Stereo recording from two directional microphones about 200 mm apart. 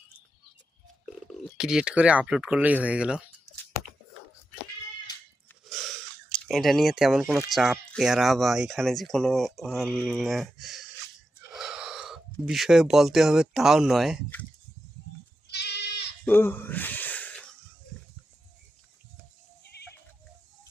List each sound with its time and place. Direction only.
1.3 s speech: centre (ahead or behind)
5.6 s speech: centre (ahead or behind)
15.4 s goat: 55° left (ahead or behind)
16.2 s wheeze: 10° left (ahead or behind)
19.6 s music: 55° left (ahead or behind)